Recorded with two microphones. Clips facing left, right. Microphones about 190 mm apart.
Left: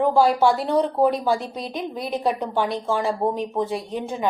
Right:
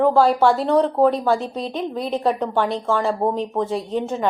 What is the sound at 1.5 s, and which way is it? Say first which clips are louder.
Speech: right 4 dB; 25° right (ahead or behind).